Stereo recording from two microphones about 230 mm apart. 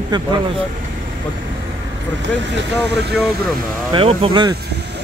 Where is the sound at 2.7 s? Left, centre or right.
Centre.